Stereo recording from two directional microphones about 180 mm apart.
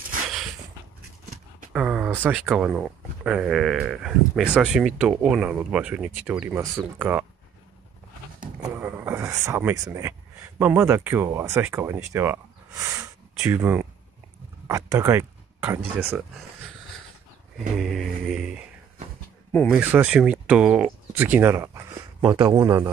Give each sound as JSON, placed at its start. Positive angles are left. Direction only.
{"t": 1.7, "sound": "speech", "side_deg": -5}
{"t": 8.5, "sound": "a sound", "side_deg": -15}
{"t": 10.6, "sound": "speech", "side_deg": -10}
{"t": 17.6, "sound": "speech", "side_deg": 0}
{"t": 19.7, "sound": "speech", "side_deg": -10}